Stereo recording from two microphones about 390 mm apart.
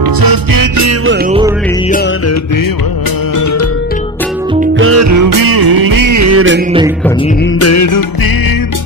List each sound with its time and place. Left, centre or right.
0.0 s music: right
4.7 s music: right
7.5 s music: left